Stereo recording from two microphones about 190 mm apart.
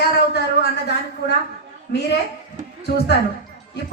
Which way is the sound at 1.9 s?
60° left (ahead or behind).